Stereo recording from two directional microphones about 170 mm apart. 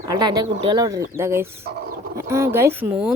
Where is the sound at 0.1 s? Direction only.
25° right (ahead or behind).